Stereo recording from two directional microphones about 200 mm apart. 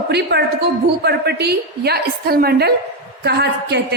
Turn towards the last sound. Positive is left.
turn(degrees=-55)  # may be behind; listen again after turning